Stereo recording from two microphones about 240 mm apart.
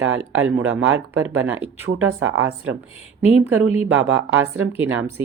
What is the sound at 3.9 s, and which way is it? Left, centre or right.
Speech, right.